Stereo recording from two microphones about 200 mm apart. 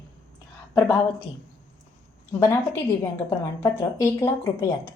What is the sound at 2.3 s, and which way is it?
A woman's voice, 15° left (ahead or behind).